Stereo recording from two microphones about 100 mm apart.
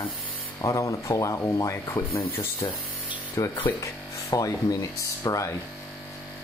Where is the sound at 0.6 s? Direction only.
35° left (ahead or behind).